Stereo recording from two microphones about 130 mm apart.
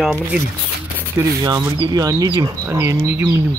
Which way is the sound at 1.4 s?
30° right (ahead or behind).